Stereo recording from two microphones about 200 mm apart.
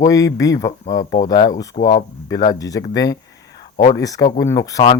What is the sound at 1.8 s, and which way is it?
Speech, 35° left (ahead or behind).